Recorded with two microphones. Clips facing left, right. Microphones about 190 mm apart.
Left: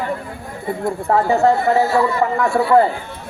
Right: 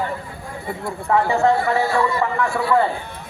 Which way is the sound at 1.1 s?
40° left (ahead or behind).